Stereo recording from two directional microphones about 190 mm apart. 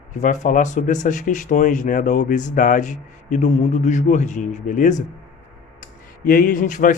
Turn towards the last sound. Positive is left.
turn(degrees=45)  # may be behind; listen again after turning